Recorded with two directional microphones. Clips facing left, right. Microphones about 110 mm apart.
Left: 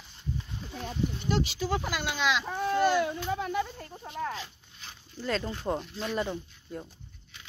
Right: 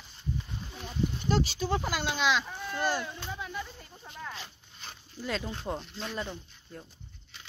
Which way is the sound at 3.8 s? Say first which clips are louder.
Left 8 dB; 50° left (ahead or behind).